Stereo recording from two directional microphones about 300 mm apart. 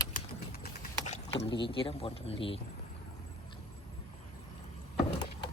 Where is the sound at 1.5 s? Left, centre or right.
Centre.